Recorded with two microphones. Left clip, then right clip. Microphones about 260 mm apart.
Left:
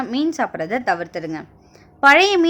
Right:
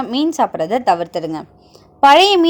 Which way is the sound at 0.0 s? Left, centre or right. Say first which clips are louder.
Right 5 dB; centre.